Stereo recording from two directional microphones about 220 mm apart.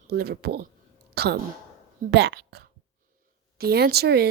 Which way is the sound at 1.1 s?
45° right (ahead or behind).